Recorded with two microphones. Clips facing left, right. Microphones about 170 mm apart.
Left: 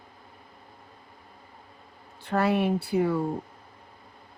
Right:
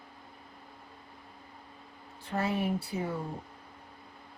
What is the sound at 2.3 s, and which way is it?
Speech, 70° left (ahead or behind).